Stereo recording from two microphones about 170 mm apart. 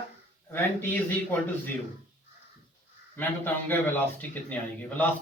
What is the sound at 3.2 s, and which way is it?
A man's voice, 10° left (ahead or behind).